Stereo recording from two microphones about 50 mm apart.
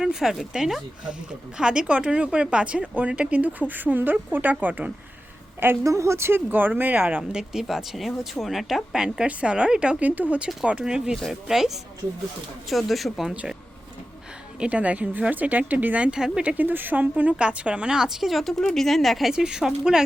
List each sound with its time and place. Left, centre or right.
0.0 s speech: centre; by 4.9 s right
5.8 s a woman's voice: right
6.5 s speech: right
7.5 s a woman's voice: centre
9.0 s speech: centre
10.0 s a woman's voice: right; by 13.3 s centre
14.6 s speech: right
16.6 s speech: right
17.3 s a woman's voice: right; by 19.3 s centre
19.3 s speech: centre